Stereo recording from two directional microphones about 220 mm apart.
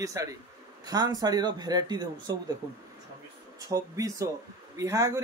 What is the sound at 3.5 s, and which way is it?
A man's voice, 15° right (ahead or behind).